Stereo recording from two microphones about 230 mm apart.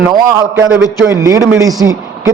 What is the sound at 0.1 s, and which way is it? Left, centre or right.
A man's voice, centre.